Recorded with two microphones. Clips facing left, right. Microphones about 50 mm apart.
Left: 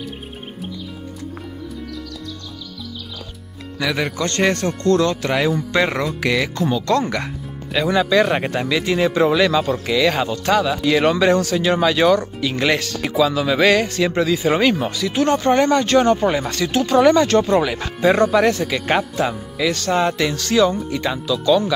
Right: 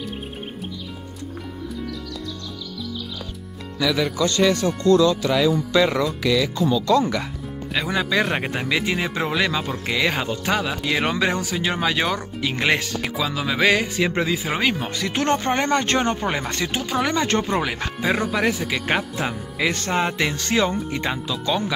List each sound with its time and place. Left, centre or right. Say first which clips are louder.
3.7 s speech: even; left
6.2 s speech: left 2 dB; left
7.7 s speech: left 6 dB; centre
13.0 s speech: left 7 dB; centre
14.1 s speech: left 4 dB; right
14.4 s speech: left 6 dB; centre
14.9 s speech: left 3 dB; right
16.7 s speech: left 11 dB; centre
17.3 s speech: left 6 dB; right
18.0 s speech: left 7 dB; centre
19.1 s speech: left 4 dB; centre